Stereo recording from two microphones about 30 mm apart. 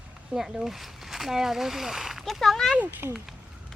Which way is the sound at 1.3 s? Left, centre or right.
Centre.